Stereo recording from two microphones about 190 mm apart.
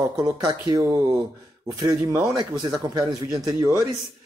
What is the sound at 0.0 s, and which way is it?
A man's voice, 20° right (ahead or behind).